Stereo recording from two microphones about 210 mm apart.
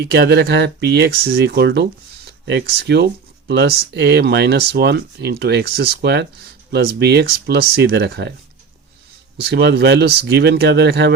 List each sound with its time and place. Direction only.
0.1 s speech: 50° right (ahead or behind)
9.4 s speech: 55° right (ahead or behind)